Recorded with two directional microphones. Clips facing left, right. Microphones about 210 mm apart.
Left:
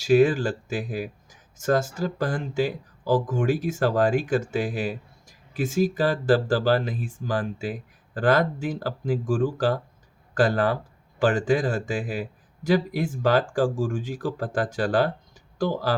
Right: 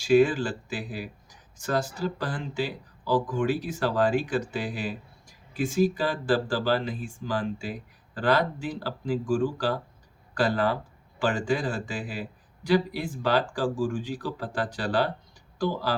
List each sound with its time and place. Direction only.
0.0 s speech: 45° left (ahead or behind)